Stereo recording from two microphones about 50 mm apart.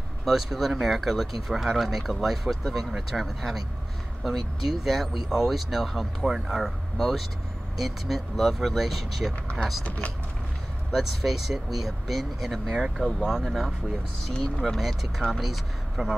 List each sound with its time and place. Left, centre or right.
0.2 s speech: centre
9.8 s speech: left
10.9 s speech: centre
13.0 s speech: centre
14.8 s speech: centre